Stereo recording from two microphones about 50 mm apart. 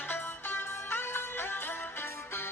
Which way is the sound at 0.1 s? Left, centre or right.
Left.